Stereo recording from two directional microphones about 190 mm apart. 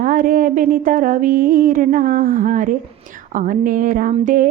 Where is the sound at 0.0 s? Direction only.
45° right (ahead or behind).